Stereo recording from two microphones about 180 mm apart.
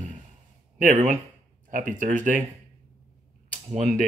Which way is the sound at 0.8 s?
45° right (ahead or behind).